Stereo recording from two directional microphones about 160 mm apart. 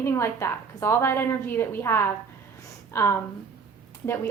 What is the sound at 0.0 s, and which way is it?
A woman's voice, 15° left (ahead or behind).